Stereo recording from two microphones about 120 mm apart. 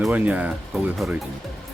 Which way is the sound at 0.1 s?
15° right (ahead or behind).